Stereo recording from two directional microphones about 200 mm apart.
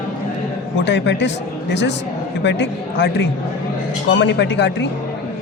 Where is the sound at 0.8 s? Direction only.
60° left (ahead or behind).